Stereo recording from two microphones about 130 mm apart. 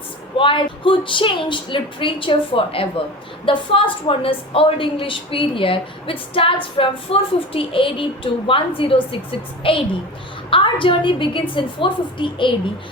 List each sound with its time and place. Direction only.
0.3 s a woman's voice: 40° left (ahead or behind)